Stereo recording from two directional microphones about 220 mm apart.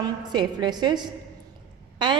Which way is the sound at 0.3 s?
20° right (ahead or behind).